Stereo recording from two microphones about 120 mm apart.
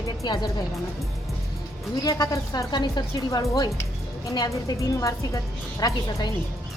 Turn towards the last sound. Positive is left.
turn(degrees=30)  # may be behind; listen again after turning